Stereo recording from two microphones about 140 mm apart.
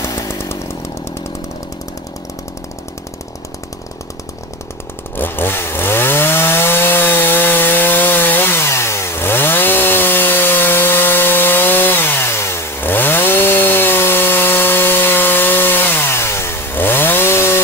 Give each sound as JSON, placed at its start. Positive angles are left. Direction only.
{"t": 0.0, "sound": "chainsaw", "side_deg": 20}
{"t": 5.1, "sound": "chainsaw", "side_deg": 15}